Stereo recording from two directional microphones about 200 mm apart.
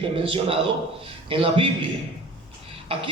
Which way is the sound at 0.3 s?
25° right (ahead or behind).